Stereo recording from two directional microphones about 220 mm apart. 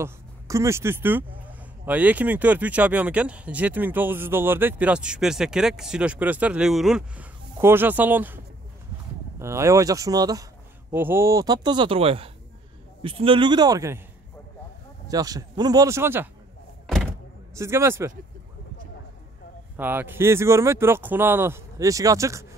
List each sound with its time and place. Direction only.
0.0 s speech: 15° right (ahead or behind)
9.4 s speech: 15° right (ahead or behind)
15.0 s speech: 15° right (ahead or behind)
16.8 s a sound: centre (ahead or behind)
17.6 s speech: 10° right (ahead or behind)
19.8 s speech: 10° right (ahead or behind)